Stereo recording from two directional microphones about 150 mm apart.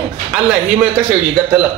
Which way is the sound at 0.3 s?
5° right (ahead or behind).